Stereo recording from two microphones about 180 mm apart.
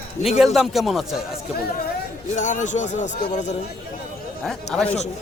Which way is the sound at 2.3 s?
45° left (ahead or behind).